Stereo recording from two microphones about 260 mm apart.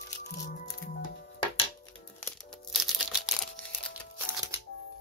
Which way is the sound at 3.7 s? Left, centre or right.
Centre.